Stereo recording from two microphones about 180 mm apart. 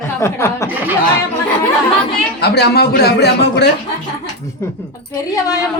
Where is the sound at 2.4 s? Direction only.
65° left (ahead or behind).